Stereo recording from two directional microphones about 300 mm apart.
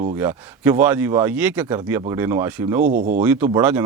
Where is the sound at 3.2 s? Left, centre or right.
Centre.